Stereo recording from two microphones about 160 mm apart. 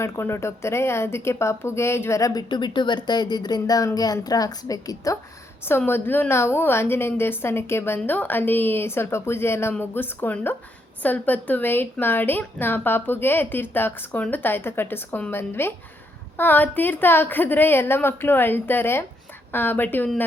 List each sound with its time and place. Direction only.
0.0 s a woman's voice: 15° left (ahead or behind)